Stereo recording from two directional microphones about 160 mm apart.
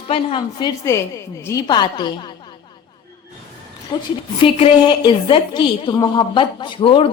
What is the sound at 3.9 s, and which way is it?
A woman's voice, 25° left (ahead or behind).